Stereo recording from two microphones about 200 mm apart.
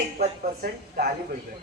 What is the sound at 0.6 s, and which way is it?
Speech, 50° right (ahead or behind).